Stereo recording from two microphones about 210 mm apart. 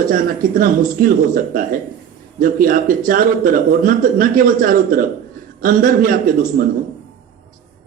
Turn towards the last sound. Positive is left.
turn(degrees=-40)  # may be behind; listen again after turning